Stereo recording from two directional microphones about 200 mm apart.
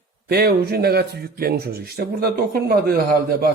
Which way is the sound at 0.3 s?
50° right (ahead or behind).